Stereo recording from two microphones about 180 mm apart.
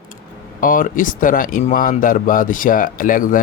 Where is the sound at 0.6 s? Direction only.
50° left (ahead or behind).